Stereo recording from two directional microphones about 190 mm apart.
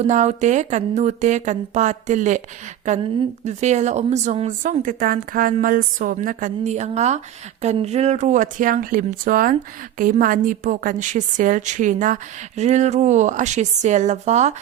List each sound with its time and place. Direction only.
0.0 s a woman's voice: 35° right (ahead or behind)